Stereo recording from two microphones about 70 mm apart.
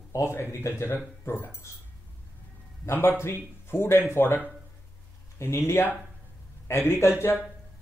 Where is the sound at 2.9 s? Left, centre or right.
Left.